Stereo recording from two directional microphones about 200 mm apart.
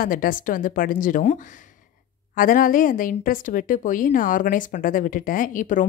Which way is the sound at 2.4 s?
45° left (ahead or behind).